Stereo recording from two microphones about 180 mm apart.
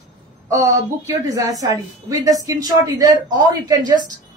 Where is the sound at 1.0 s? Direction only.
20° right (ahead or behind).